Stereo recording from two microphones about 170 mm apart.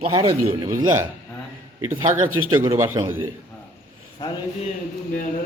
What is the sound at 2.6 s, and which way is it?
Speech, 15° right (ahead or behind).